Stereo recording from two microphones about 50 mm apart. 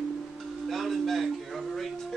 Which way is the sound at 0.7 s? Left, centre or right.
Centre.